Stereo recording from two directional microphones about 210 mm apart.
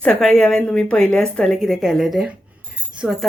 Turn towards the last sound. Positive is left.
turn(degrees=0)  # may be behind; listen again after turning